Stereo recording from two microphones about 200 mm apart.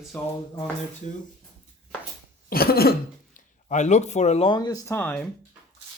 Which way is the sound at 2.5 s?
50° left (ahead or behind).